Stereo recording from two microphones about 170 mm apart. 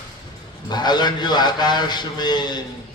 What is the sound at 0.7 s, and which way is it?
Speech, 25° left (ahead or behind).